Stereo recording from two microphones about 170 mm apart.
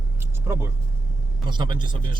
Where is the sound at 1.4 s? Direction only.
25° right (ahead or behind).